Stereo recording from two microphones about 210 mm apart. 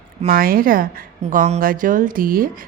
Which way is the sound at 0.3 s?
45° right (ahead or behind).